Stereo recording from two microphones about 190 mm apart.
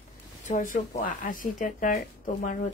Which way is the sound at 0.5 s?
40° left (ahead or behind).